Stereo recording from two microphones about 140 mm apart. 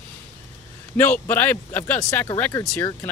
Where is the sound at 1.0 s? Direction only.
15° left (ahead or behind).